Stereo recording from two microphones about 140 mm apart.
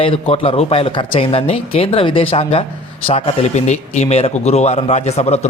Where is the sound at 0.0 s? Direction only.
40° left (ahead or behind).